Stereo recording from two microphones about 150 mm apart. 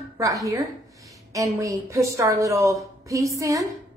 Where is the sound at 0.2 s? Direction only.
20° right (ahead or behind).